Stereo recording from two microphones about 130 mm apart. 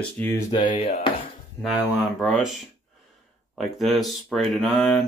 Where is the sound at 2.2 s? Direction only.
Centre (ahead or behind).